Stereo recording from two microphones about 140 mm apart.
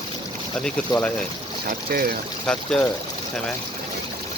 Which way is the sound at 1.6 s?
90° right.